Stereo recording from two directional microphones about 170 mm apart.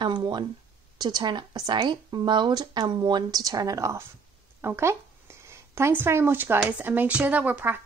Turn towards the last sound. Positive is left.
turn(degrees=-10)  # may be behind; listen again after turning